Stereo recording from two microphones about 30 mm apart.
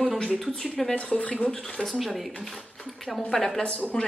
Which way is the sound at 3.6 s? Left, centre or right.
Left.